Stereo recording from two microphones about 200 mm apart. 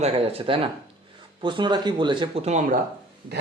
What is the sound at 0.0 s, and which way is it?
Speech, 30° right (ahead or behind).